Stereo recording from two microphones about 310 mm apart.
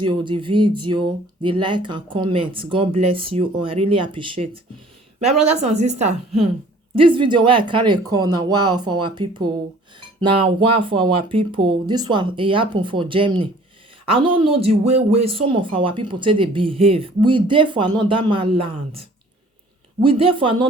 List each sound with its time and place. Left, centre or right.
0.0 s a woman's voice: centre